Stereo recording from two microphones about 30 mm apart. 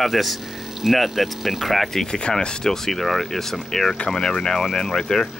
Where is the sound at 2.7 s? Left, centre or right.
Centre.